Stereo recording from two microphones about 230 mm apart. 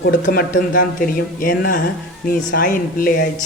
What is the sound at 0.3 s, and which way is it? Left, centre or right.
Speech, left.